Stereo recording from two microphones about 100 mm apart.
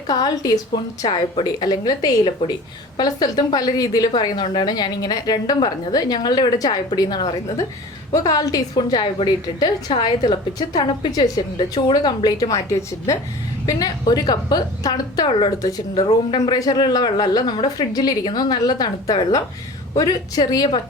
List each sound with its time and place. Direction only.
0.1 s a woman's voice: 40° left (ahead or behind)
13.7 s a woman's voice: 40° left (ahead or behind)
15.3 s a woman's voice: 55° left (ahead or behind)